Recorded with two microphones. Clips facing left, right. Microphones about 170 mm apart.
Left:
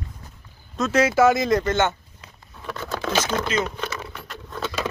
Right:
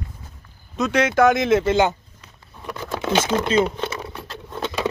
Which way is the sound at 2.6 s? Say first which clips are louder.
Right 1 dB; 15° right (ahead or behind).